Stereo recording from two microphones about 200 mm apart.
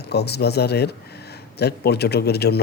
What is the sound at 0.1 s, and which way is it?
A man's voice, 55° left (ahead or behind).